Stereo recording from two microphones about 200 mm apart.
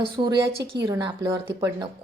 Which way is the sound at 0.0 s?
25° right (ahead or behind).